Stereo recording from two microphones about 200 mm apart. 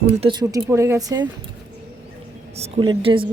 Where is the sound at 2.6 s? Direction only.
25° right (ahead or behind).